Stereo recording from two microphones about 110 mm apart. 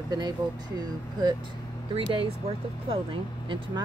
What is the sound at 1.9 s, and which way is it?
Speech, 55° right (ahead or behind).